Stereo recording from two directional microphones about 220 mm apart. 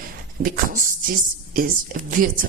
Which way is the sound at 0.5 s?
40° right (ahead or behind).